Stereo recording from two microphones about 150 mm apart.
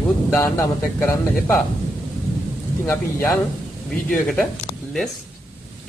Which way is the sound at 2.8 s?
15° left (ahead or behind).